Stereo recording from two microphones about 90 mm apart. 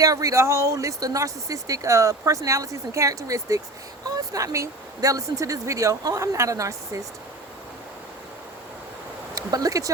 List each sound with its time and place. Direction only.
0.0 s speech: 35° right (ahead or behind)
9.3 s speech: 40° right (ahead or behind)